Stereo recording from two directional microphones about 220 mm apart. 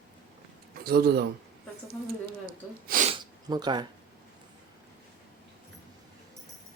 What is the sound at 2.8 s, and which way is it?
Sneeze, 40° right (ahead or behind).